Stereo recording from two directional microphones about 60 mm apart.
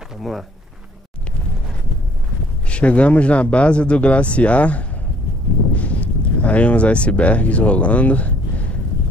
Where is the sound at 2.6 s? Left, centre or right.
Centre.